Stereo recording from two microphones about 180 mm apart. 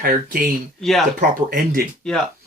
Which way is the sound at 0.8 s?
Centre (ahead or behind).